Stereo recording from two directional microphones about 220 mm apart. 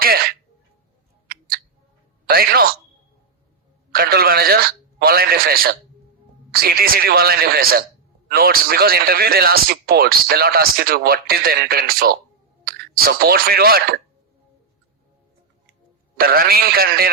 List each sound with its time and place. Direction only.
0.0 s a sound: 45° right (ahead or behind)
2.2 s speech: 45° right (ahead or behind)
3.9 s a man's voice: 45° right (ahead or behind)
16.1 s a man's voice: 40° right (ahead or behind)